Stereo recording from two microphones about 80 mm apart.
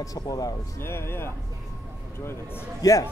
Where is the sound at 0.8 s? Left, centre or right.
Left.